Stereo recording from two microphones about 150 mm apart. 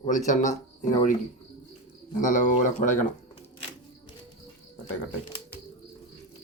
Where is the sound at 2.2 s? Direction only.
60° left (ahead or behind).